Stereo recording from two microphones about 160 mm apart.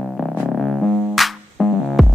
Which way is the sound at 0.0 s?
Centre (ahead or behind).